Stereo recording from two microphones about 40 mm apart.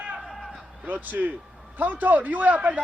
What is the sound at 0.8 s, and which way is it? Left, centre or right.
A man's voice, right.